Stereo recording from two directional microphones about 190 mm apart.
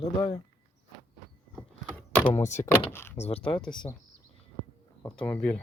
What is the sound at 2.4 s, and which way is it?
Speech, 40° left (ahead or behind).